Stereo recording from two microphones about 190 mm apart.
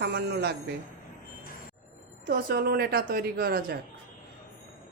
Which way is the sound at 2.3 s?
50° right (ahead or behind).